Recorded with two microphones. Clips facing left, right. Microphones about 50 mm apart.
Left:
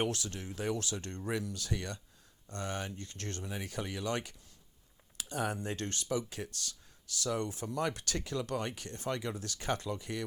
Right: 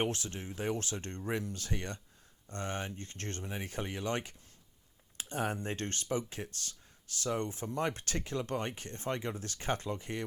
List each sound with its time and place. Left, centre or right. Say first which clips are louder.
0.0 s speech: even; right